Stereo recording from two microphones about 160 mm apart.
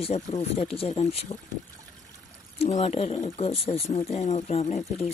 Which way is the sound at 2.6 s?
40° left (ahead or behind).